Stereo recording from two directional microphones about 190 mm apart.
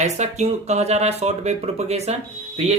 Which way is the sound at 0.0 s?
35° right (ahead or behind).